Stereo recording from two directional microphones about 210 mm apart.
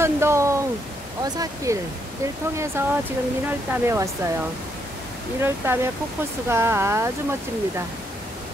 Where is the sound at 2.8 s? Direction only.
10° right (ahead or behind).